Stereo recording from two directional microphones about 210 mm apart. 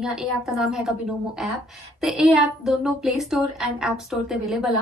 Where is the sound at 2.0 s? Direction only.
Centre (ahead or behind).